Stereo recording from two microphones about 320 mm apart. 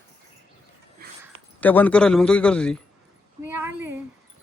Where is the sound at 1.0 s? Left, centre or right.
Right.